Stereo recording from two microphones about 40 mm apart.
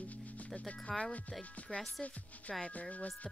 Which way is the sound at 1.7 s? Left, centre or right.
Left.